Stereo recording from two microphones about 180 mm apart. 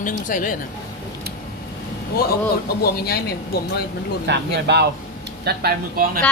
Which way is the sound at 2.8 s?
60° left (ahead or behind).